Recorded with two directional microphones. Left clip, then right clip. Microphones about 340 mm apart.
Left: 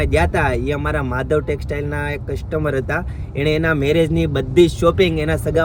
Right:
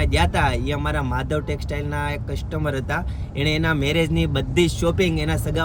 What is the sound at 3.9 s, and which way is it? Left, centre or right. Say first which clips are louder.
Speech: left 5 dB; centre.